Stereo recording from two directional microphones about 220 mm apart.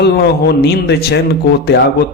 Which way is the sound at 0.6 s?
50° left (ahead or behind).